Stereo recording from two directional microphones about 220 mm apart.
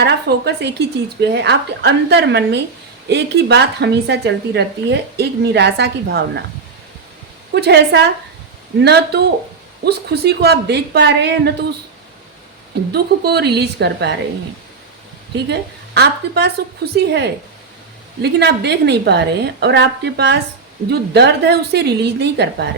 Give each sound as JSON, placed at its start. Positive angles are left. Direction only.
{"t": 0.0, "sound": "a woman's voice", "side_deg": -50}
{"t": 7.5, "sound": "a woman's voice", "side_deg": -50}
{"t": 12.9, "sound": "a woman's voice", "side_deg": -45}
{"t": 16.0, "sound": "a woman's voice", "side_deg": -45}